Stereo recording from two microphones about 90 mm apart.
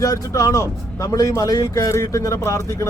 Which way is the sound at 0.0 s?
40° left (ahead or behind).